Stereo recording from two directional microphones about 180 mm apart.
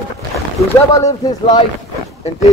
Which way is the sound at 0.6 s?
15° left (ahead or behind).